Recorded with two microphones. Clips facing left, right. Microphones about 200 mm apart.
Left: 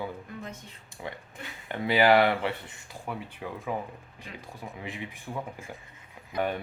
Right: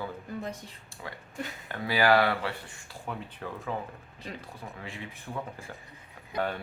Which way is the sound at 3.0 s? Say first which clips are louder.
Left 1 dB; 10° left (ahead or behind).